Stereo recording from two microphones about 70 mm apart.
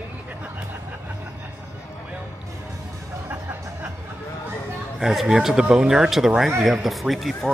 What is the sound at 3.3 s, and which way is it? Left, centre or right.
Music, right.